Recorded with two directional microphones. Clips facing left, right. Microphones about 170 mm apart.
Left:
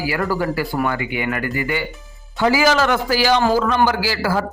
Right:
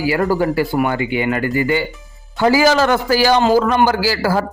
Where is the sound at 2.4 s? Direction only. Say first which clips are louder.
Right 3 dB; 40° right (ahead or behind).